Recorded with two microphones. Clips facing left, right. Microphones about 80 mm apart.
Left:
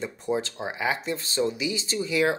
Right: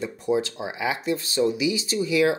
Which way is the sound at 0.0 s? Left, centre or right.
Left.